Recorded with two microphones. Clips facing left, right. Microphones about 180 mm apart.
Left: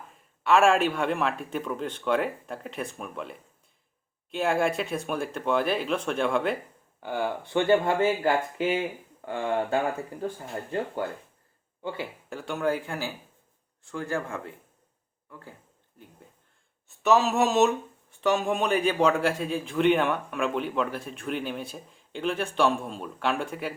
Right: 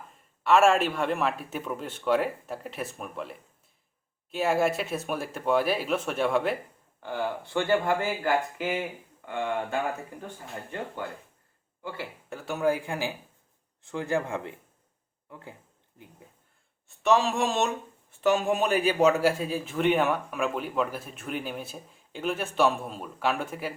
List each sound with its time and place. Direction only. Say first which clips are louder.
0.4 s speech: even; centre (ahead or behind)
7.0 s speech: left 2 dB; 15° left (ahead or behind); by 9.7 s 35° left (ahead or behind)
11.8 s speech: left 4 dB; 20° left (ahead or behind)
12.3 s speech: right 1 dB; 5° right (ahead or behind); by 15.5 s 20° right (ahead or behind)
16.9 s speech: left 1 dB; centre (ahead or behind)